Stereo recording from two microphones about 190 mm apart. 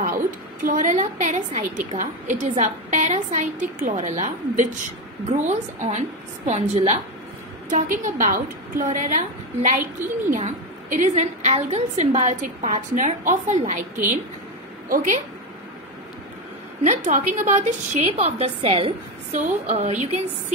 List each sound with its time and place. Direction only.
0.7 s a woman's voice: 45° right (ahead or behind)
10.0 s speech: 10° right (ahead or behind)
10.3 s a woman's voice: 40° right (ahead or behind)
16.8 s a woman's voice: 40° right (ahead or behind)